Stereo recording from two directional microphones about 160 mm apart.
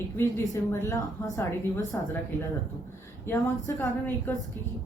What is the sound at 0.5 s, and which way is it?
A woman's voice, 20° left (ahead or behind).